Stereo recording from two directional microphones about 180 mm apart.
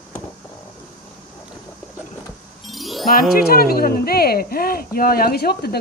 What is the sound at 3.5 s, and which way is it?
Speech, 55° left (ahead or behind).